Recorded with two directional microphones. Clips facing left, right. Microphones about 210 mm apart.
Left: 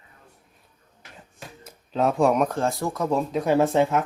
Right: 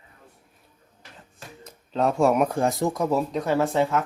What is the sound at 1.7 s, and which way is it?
Speech, centre (ahead or behind).